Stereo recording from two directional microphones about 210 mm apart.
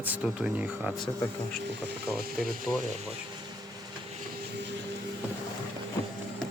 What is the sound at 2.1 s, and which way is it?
Mechanisms, centre (ahead or behind).